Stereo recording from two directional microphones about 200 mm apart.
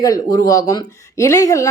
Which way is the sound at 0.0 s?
15° left (ahead or behind).